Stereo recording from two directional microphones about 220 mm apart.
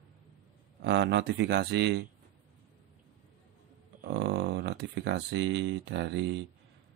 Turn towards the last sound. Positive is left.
turn(degrees=-55)  # may be behind; listen again after turning